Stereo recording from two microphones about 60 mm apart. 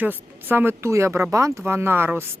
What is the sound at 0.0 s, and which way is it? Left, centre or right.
Speech, right.